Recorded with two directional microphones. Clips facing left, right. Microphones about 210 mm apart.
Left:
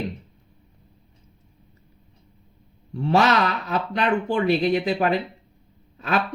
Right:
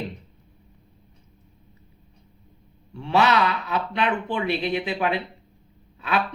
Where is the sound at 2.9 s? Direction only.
40° left (ahead or behind).